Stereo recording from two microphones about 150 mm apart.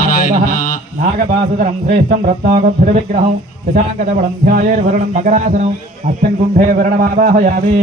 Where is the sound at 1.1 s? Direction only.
60° right (ahead or behind).